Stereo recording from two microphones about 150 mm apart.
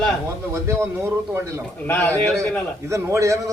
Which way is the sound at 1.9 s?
10° left (ahead or behind).